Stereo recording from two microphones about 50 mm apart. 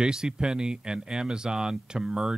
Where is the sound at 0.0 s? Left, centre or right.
Centre.